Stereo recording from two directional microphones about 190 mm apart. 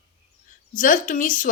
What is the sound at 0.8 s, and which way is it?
Speech, 45° left (ahead or behind).